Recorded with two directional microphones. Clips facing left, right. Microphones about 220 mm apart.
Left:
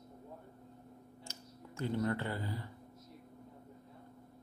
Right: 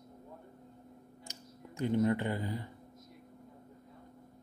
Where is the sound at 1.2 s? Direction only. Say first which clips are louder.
Right 1 dB; 15° right (ahead or behind).